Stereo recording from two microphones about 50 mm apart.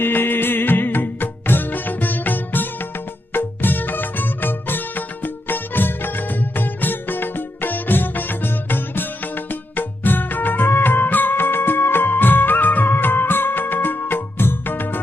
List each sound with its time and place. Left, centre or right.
0.0 s music: left